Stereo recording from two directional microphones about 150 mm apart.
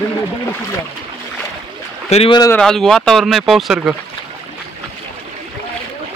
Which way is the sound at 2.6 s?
5° left (ahead or behind).